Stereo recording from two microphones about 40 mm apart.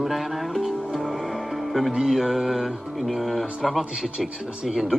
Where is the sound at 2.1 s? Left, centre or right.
Centre.